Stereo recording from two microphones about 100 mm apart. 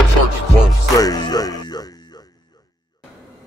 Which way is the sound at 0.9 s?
40° left (ahead or behind).